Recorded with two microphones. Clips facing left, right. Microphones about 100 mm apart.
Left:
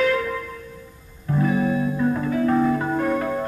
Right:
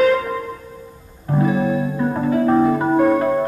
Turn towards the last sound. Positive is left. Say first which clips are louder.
# right 7 dB
turn(degrees=-20)  # may be behind; listen again after turning